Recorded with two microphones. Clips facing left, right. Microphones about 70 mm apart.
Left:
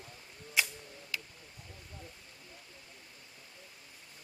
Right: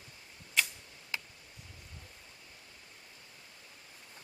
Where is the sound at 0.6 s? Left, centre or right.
Centre.